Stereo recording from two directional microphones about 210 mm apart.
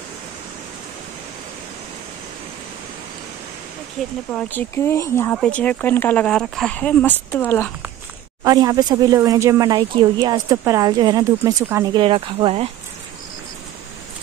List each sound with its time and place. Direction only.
4.3 s speech: 5° left (ahead or behind)
8.5 s speech: 20° right (ahead or behind)